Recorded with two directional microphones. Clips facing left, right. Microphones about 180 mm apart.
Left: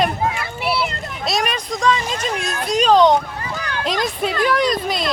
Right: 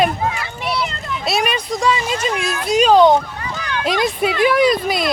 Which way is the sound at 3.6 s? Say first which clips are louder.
Right 5 dB; 40° left (ahead or behind).